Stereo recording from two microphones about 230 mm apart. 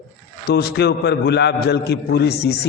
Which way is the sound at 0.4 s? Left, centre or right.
Left.